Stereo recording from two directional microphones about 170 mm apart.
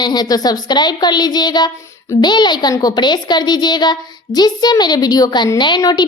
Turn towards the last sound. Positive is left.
turn(degrees=25)  # may be behind; listen again after turning